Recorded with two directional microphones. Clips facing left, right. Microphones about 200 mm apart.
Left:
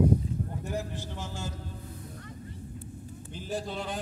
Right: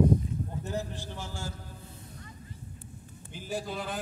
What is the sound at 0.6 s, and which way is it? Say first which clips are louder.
Speech: even; 15° left (ahead or behind).